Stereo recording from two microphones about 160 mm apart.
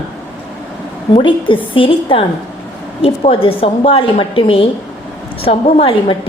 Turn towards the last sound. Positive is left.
turn(degrees=35)  # may be behind; listen again after turning